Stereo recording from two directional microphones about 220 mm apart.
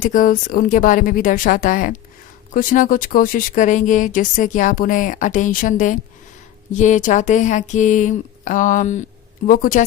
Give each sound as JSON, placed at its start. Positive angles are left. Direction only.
{"t": 0.0, "sound": "speech", "side_deg": 35}